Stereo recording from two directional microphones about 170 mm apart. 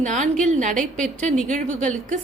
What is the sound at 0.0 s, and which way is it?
A woman's voice, 45° right (ahead or behind).